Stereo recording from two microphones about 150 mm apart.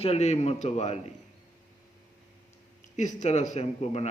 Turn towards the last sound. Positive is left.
turn(degrees=45)  # may be behind; listen again after turning